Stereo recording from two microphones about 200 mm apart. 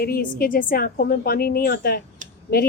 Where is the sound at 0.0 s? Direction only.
45° left (ahead or behind).